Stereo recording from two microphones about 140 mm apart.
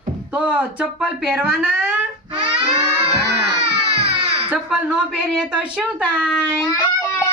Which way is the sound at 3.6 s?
45° right (ahead or behind).